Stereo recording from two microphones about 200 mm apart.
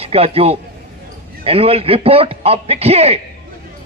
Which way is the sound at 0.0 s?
30° right (ahead or behind).